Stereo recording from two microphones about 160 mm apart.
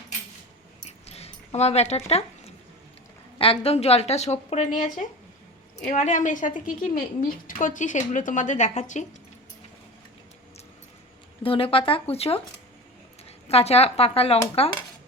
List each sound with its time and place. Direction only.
0.9 s dog: 40° left (ahead or behind)
3.3 s a woman's voice: 35° left (ahead or behind); by 4.9 s 50° left (ahead or behind)
5.9 s a woman's voice: 50° left (ahead or behind)
11.4 s a woman's voice: 35° left (ahead or behind)